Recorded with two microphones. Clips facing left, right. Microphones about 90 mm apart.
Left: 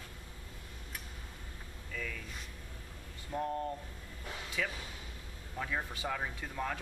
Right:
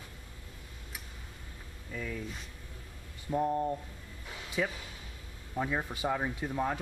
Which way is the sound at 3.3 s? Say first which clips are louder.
Right 6 dB; 15° right (ahead or behind).